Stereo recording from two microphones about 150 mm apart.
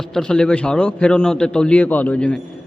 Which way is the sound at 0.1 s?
5° left (ahead or behind).